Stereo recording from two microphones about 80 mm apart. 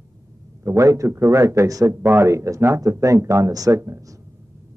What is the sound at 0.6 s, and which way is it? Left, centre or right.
Speech, right.